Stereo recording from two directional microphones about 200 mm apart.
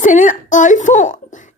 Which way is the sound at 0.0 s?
40° left (ahead or behind).